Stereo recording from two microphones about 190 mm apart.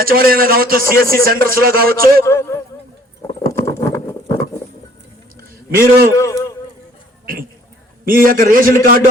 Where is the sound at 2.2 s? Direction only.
15° left (ahead or behind).